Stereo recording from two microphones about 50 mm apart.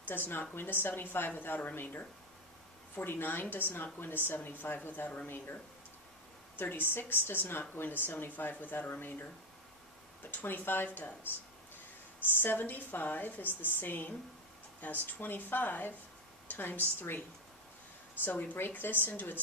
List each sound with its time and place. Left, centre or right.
0.1 s a woman's voice: left
10.3 s a woman's voice: left
12.4 s a woman's voice: left
18.2 s a woman's voice: left